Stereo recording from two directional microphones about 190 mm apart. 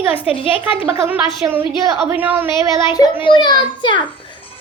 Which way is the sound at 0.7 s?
10° right (ahead or behind).